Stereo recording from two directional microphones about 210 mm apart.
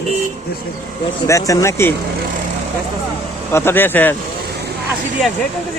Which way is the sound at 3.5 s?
10° left (ahead or behind).